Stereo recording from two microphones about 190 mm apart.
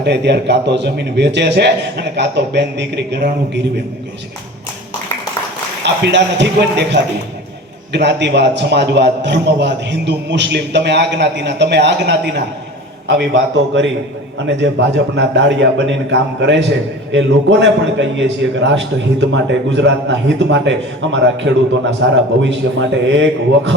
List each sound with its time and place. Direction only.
0.0 s a man's voice: 65° right (ahead or behind)
5.8 s a man's voice: 65° right (ahead or behind)